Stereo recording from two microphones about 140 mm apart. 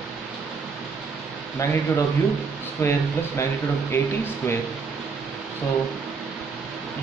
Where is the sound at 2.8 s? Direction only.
20° left (ahead or behind).